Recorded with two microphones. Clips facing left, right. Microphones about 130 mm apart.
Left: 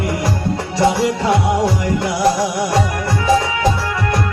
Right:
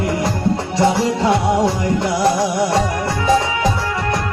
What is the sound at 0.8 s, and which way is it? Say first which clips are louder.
Music: even; 25° right (ahead or behind).